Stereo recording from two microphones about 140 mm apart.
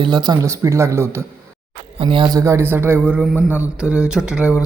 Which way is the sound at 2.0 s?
40° right (ahead or behind).